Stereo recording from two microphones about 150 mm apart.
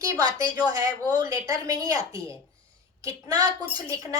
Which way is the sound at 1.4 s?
20° right (ahead or behind).